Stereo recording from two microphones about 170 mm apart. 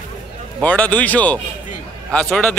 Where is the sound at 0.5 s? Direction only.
10° left (ahead or behind).